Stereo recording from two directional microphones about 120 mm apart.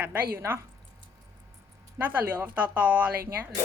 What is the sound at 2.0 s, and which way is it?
Speech, 15° right (ahead or behind).